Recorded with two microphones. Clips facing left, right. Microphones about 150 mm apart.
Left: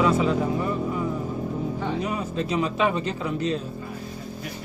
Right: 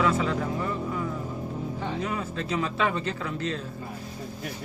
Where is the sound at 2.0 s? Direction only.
20° left (ahead or behind).